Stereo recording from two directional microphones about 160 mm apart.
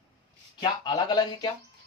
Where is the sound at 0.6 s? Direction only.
25° left (ahead or behind).